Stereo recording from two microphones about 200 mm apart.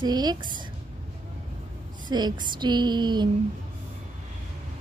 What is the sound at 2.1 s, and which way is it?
Speech, 20° right (ahead or behind).